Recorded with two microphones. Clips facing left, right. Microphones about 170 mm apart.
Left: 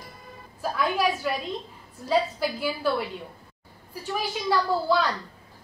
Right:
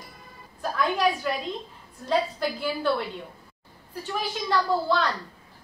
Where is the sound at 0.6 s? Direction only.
5° left (ahead or behind).